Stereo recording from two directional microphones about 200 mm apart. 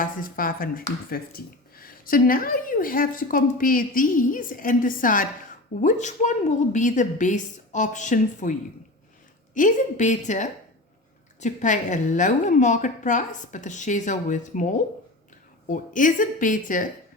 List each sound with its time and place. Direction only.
0.0 s a woman's voice: 45° left (ahead or behind)
9.6 s a woman's voice: 40° left (ahead or behind)